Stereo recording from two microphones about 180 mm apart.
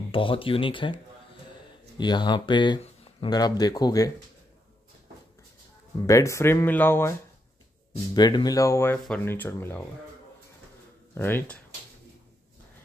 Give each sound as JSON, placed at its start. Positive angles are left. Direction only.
{"t": 0.1, "sound": "speech", "side_deg": 30}
{"t": 2.0, "sound": "speech", "side_deg": 25}
{"t": 6.0, "sound": "speech", "side_deg": 15}
{"t": 11.1, "sound": "speech", "side_deg": 10}